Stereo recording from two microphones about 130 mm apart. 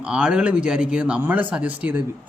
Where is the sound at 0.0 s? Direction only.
10° right (ahead or behind).